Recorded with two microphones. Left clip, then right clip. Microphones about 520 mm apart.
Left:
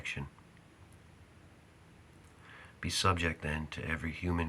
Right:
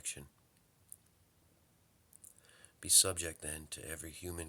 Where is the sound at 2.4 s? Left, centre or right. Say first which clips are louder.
Left 3 dB; right.